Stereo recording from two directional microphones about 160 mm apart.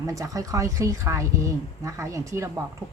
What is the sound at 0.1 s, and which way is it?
A woman's voice, 20° right (ahead or behind).